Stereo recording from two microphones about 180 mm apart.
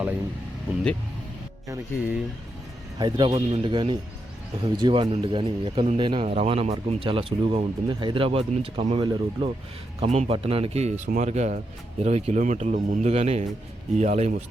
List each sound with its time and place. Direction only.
1.6 s a man's voice: 15° right (ahead or behind); by 14.4 s 40° right (ahead or behind)